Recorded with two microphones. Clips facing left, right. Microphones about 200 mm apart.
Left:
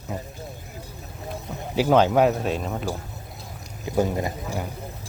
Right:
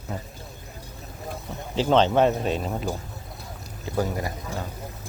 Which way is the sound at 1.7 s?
10° left (ahead or behind).